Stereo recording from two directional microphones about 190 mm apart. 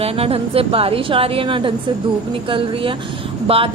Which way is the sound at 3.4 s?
30° right (ahead or behind).